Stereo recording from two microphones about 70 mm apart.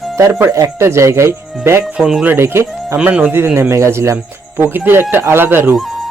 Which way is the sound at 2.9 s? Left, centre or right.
Centre.